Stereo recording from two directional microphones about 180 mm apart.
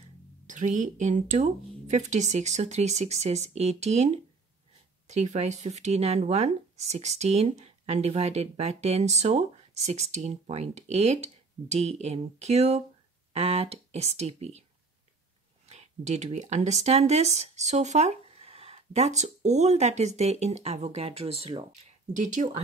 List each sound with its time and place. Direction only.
0.5 s speech: 45° right (ahead or behind)
15.7 s speech: 40° right (ahead or behind)
22.2 s speech: 40° right (ahead or behind)